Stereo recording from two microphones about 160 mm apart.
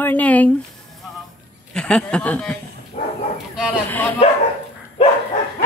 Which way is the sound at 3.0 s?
50° left (ahead or behind).